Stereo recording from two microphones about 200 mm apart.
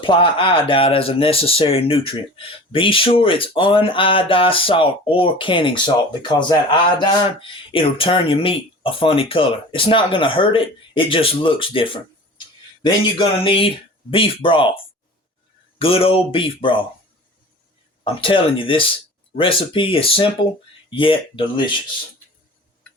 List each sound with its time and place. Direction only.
0.0 s speech: 25° left (ahead or behind)
15.8 s speech: 30° left (ahead or behind)
18.0 s speech: 25° left (ahead or behind)